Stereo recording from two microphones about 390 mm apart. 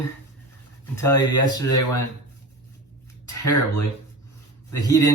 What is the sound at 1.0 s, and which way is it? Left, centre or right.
Speech, centre.